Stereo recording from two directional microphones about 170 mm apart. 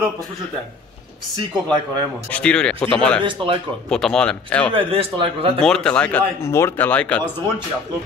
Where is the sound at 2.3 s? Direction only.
5° left (ahead or behind).